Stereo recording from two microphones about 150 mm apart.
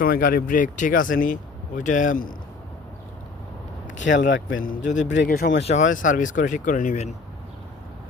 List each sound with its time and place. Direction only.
0.0 s speech: 70° left (ahead or behind)
4.2 s speech: 65° left (ahead or behind)
5.2 s speech: 90° left
5.6 s speech: 55° left (ahead or behind)